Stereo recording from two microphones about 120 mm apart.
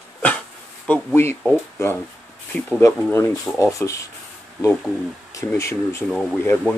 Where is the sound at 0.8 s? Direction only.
15° left (ahead or behind).